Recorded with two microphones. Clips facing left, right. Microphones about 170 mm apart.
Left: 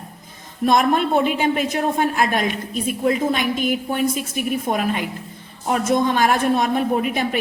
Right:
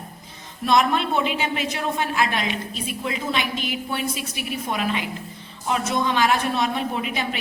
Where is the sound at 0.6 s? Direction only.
50° left (ahead or behind).